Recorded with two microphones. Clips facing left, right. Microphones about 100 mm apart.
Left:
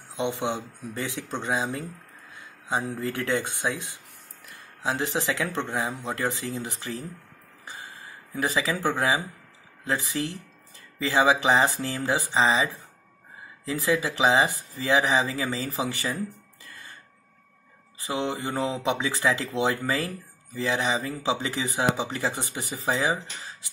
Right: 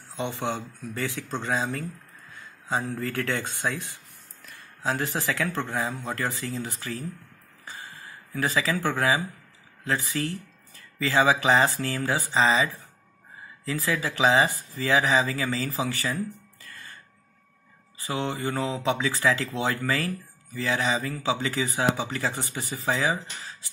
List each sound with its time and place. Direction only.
0.1 s speech: 20° left (ahead or behind)
7.6 s a sound: 15° left (ahead or behind)
9.8 s speech: 15° left (ahead or behind)
13.7 s speech: 20° left (ahead or behind)
18.0 s speech: 15° left (ahead or behind)